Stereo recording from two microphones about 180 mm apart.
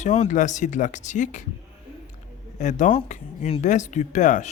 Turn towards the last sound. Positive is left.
turn(degrees=45)  # may be behind; listen again after turning